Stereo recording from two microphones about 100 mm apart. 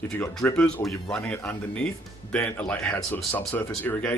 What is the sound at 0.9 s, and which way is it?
Speech, 10° left (ahead or behind).